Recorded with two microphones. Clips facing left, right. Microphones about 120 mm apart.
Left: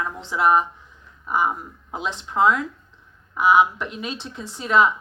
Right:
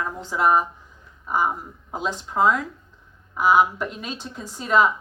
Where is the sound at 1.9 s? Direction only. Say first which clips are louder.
Even; 45° right (ahead or behind).